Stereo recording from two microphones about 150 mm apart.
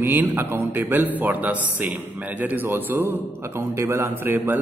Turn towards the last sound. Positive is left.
turn(degrees=-15)  # may be behind; listen again after turning